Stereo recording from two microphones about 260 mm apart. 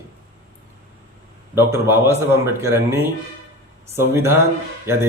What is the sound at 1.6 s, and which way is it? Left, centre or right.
Speech, centre.